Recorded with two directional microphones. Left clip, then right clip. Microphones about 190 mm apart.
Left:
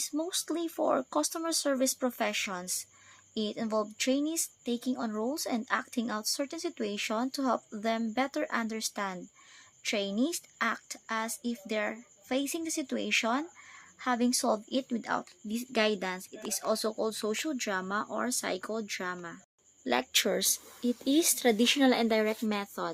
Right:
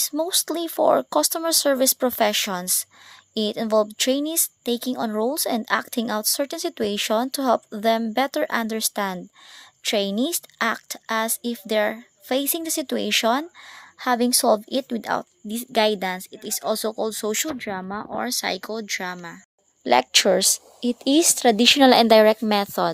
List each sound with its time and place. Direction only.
0.0 s a woman's voice: 50° right (ahead or behind); by 17.5 s 30° right (ahead or behind)
17.6 s speech: 20° right (ahead or behind)
19.8 s a woman's voice: 45° right (ahead or behind)